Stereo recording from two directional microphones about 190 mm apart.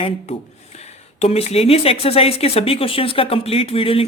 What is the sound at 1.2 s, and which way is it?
Speech, 35° left (ahead or behind).